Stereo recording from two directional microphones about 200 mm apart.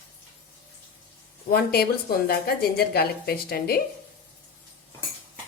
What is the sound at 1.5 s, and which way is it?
A woman's voice, 50° left (ahead or behind).